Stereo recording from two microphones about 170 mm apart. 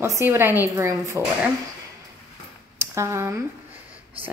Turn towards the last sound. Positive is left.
turn(degrees=-15)  # may be behind; listen again after turning